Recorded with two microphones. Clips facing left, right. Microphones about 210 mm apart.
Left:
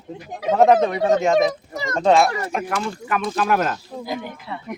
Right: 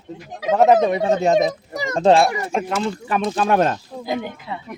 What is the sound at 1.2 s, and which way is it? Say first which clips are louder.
Speech: right 1 dB; 40° right (ahead or behind).